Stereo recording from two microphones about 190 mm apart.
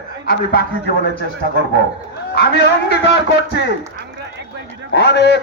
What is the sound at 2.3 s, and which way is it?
A man's voice, 60° left (ahead or behind).